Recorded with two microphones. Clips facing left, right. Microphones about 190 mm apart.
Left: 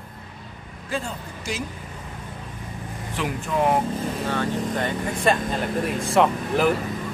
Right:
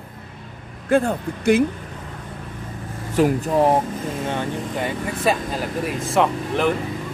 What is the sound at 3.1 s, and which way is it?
Speech, 40° right (ahead or behind).